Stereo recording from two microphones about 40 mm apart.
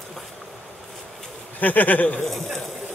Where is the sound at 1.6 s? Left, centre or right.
Left.